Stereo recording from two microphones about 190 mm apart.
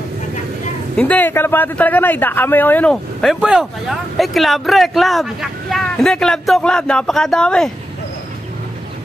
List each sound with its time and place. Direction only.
0.9 s a man's voice: 5° left (ahead or behind)